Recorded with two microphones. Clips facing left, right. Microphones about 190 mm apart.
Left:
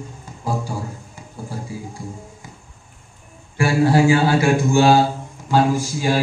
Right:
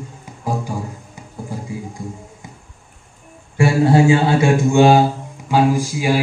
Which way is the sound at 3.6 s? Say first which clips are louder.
Right 2 dB; 25° right (ahead or behind).